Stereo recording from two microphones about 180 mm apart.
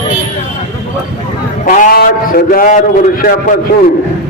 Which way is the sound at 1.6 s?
45° left (ahead or behind).